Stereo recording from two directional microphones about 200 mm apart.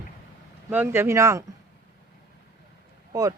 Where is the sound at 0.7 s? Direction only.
10° right (ahead or behind).